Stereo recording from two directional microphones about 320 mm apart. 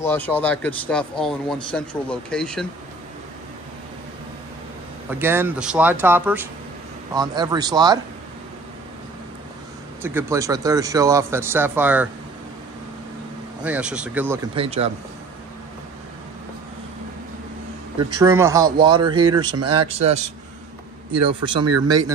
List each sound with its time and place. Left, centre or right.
0.0 s speech: centre
5.1 s speech: centre
10.0 s speech: centre
13.6 s speech: centre
18.2 s speech: centre
19.5 s speech: right
19.9 s a man's voice: centre
21.3 s speech: centre